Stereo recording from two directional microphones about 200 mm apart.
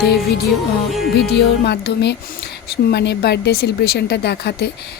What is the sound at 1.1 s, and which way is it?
A woman's voice, 55° left (ahead or behind).